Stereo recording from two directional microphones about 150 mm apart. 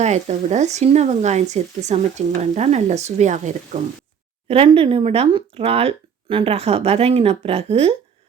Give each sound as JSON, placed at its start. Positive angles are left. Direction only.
{"t": 0.0, "sound": "speech", "side_deg": -50}
{"t": 4.4, "sound": "speech", "side_deg": -40}